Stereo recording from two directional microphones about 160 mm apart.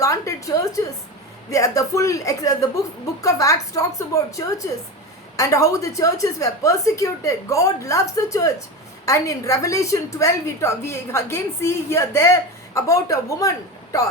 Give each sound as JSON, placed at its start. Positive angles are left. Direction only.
{"t": 0.0, "sound": "a woman's voice", "side_deg": 20}